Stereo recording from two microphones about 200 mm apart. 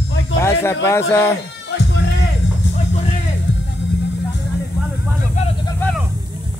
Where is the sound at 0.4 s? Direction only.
15° left (ahead or behind).